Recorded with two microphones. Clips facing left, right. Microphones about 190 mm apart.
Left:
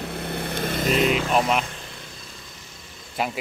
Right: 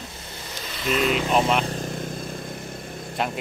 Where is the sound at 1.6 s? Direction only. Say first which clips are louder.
Right 10 dB; 40° right (ahead or behind).